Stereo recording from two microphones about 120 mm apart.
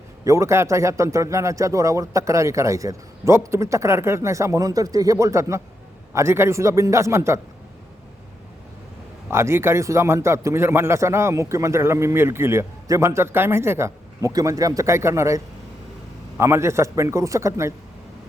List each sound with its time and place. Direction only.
0.3 s a man's voice: 25° right (ahead or behind)
9.3 s a man's voice: 20° right (ahead or behind)
16.4 s a man's voice: 20° right (ahead or behind)